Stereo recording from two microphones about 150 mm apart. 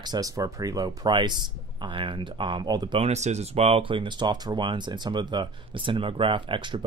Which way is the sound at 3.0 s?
50° right (ahead or behind).